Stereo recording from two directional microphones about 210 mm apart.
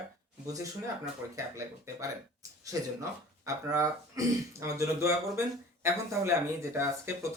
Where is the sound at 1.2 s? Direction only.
15° right (ahead or behind).